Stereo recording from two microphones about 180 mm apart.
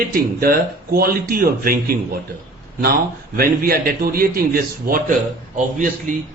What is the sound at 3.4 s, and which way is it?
A man's voice, 55° right (ahead or behind).